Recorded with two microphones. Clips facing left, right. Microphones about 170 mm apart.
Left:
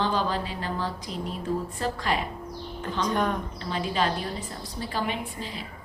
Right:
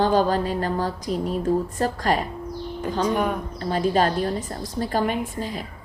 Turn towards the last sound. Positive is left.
turn(degrees=-45)  # may be behind; listen again after turning